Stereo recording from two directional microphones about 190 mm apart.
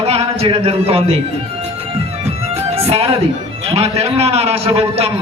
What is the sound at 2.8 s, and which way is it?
Speech, 30° right (ahead or behind).